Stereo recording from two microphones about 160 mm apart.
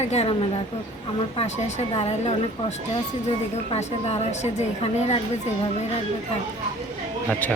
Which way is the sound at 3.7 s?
45° left (ahead or behind).